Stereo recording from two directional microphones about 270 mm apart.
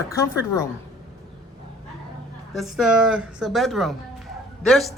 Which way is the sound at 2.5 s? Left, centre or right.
Centre.